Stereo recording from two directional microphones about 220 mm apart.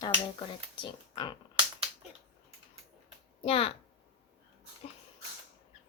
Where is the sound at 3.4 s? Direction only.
25° left (ahead or behind).